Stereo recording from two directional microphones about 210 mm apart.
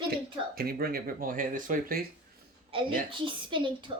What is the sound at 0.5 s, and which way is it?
Speech, 45° right (ahead or behind).